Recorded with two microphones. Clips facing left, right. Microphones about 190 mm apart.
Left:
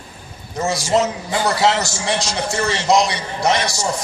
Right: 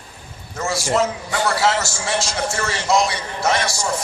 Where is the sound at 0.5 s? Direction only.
20° left (ahead or behind).